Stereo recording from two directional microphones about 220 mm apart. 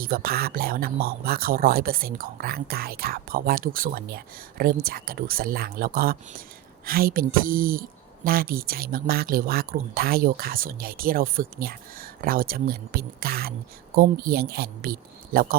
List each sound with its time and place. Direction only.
0.0 s speech: 45° right (ahead or behind)